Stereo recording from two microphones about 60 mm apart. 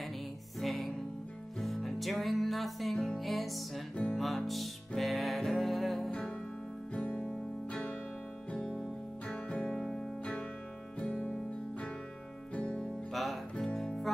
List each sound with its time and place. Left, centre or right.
0.6 s music: centre
6.9 s music: left
9.3 s music: centre
9.7 s music: centre
11.0 s music: left
12.5 s music: centre
13.1 s music: centre